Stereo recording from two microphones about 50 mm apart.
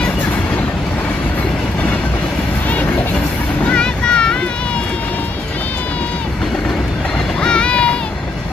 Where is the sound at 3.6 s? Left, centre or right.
Centre.